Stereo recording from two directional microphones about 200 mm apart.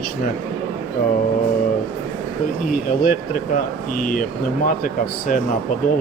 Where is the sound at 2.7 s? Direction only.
45° left (ahead or behind).